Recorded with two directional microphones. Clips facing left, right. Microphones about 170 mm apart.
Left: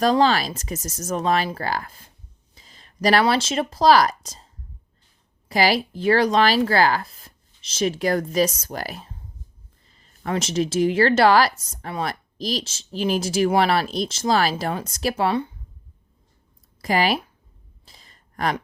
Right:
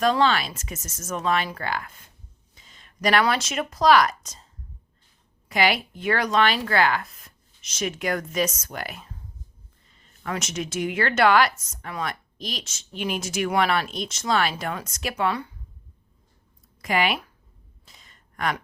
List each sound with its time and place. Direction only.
0.0 s a woman's voice: 35° left (ahead or behind)
5.5 s a woman's voice: 35° left (ahead or behind)
16.8 s a woman's voice: 35° left (ahead or behind)
17.8 s a sound: 35° left (ahead or behind)